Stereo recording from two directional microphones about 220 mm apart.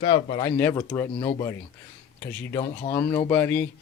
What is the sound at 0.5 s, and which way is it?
Speech, 10° left (ahead or behind).